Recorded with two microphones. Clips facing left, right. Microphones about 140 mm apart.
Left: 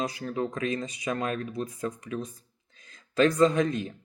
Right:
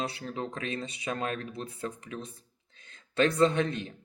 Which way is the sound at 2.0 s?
40° left (ahead or behind).